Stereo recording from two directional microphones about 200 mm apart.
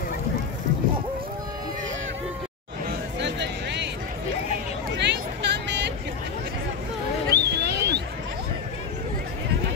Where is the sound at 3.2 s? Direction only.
60° right (ahead or behind).